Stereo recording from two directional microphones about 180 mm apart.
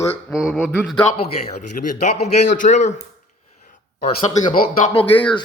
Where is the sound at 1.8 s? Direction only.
45° left (ahead or behind).